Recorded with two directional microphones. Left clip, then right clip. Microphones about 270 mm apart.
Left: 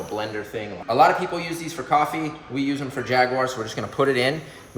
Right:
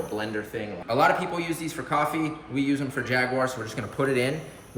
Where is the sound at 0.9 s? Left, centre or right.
Centre.